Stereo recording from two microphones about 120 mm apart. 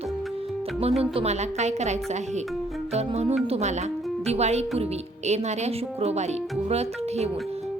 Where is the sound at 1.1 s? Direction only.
65° right (ahead or behind).